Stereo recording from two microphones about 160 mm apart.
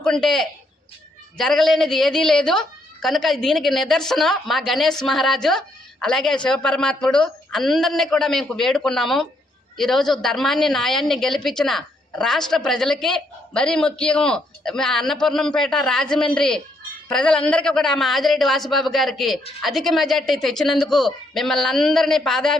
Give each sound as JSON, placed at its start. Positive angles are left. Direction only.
{"t": 0.0, "sound": "a woman's voice", "side_deg": 5}